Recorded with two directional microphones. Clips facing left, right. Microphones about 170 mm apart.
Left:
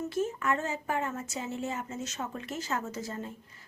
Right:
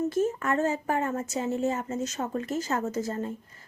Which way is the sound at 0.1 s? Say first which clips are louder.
Right 4 dB; 40° right (ahead or behind).